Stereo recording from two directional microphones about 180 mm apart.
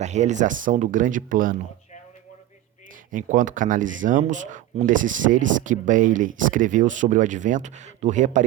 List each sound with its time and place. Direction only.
0.0 s speech: 40° right (ahead or behind)
3.1 s speech: 45° right (ahead or behind)